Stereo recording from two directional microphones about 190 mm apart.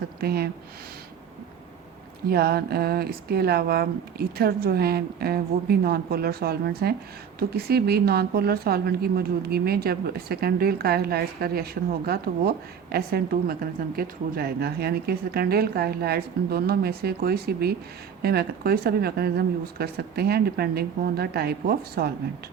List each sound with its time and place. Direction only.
0.2 s speech: 55° right (ahead or behind)
2.2 s speech: 55° right (ahead or behind)